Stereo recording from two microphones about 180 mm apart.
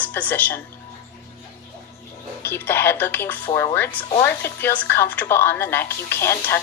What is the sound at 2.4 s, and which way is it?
Speech, 10° left (ahead or behind).